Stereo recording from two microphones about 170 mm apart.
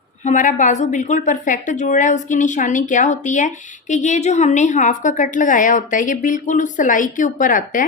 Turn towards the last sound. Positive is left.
turn(degrees=50)  # may be behind; listen again after turning